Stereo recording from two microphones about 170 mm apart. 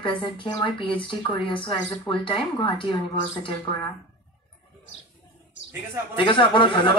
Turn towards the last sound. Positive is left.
turn(degrees=30)  # may be behind; listen again after turning